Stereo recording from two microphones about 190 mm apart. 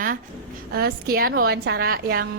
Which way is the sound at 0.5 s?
55° right (ahead or behind).